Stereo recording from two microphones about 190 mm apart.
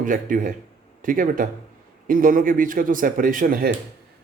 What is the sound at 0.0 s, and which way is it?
Speech, 45° right (ahead or behind).